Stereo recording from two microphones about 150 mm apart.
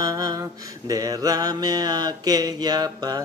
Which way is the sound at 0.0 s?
25° right (ahead or behind).